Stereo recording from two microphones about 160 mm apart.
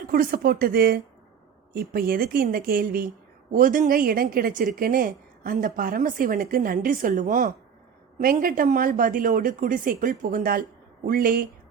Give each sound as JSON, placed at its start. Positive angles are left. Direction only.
{"t": 0.1, "sound": "a woman's voice", "side_deg": -60}